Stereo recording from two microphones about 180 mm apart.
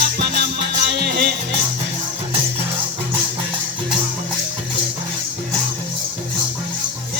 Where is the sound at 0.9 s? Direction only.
60° right (ahead or behind).